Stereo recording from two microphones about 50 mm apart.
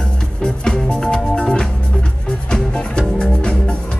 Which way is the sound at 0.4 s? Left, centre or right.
Centre.